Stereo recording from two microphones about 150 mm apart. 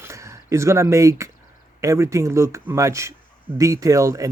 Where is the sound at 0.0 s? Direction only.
20° right (ahead or behind).